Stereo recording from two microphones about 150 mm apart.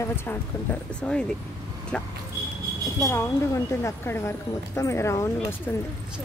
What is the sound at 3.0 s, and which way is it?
Speech, 20° left (ahead or behind).